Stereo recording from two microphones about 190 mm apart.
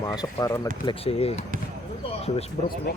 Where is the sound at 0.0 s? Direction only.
15° left (ahead or behind).